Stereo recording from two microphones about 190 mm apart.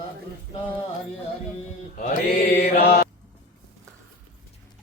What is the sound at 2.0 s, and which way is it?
Mantra, 45° left (ahead or behind).